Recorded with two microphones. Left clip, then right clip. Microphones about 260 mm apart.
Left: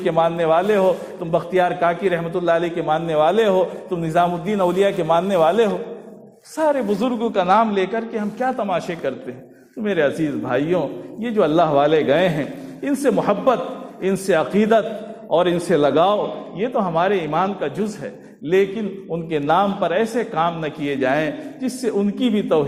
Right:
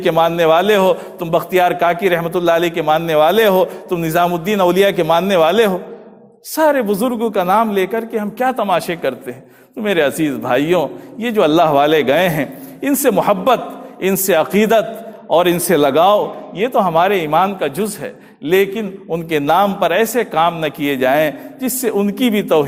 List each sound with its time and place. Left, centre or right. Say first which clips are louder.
0.0 s a man's voice: right 5 dB; right